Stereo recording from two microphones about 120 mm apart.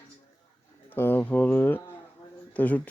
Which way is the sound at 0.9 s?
15° left (ahead or behind).